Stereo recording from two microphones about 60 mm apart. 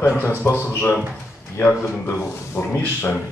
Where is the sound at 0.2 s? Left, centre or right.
Left.